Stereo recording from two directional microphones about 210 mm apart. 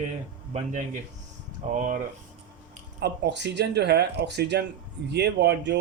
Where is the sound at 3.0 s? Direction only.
55° right (ahead or behind).